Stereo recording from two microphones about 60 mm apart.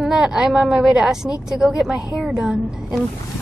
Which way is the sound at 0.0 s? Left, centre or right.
Centre.